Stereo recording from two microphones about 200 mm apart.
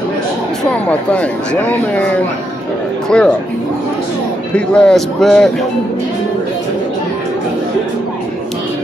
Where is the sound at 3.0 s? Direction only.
5° left (ahead or behind).